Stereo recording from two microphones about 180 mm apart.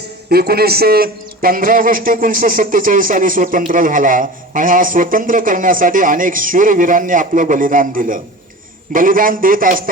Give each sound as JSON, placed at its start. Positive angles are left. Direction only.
{"t": 0.3, "sound": "a man's voice", "side_deg": -60}